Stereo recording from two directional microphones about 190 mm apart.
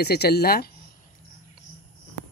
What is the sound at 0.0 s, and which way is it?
Speech, 55° left (ahead or behind).